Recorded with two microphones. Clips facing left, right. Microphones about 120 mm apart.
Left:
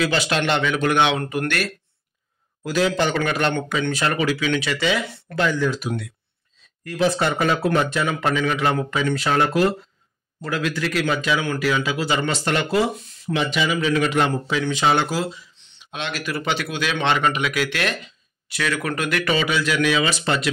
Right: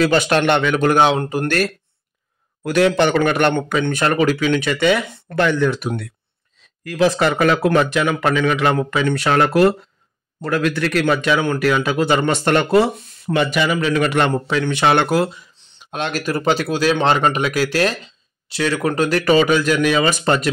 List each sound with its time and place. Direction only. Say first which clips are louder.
0.0 s speech: right 6 dB; 50° right (ahead or behind)
1.2 s speech: right 3 dB; 25° right (ahead or behind)
2.6 s a man's voice: right 5 dB; 65° right (ahead or behind)
6.8 s a man's voice: right 4 dB; 90° right; by 15.4 s 60° right (ahead or behind)
15.5 s speech: right 6 dB; 45° right (ahead or behind)